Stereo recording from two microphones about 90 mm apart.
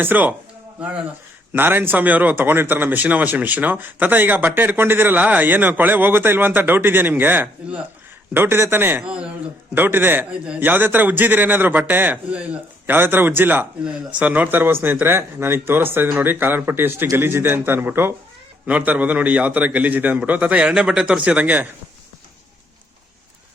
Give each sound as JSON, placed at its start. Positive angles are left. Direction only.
{"t": 0.0, "sound": "speech", "side_deg": -20}
{"t": 1.5, "sound": "speech", "side_deg": -25}
{"t": 9.0, "sound": "a man's voice", "side_deg": -10}
{"t": 9.7, "sound": "a man's voice", "side_deg": -20}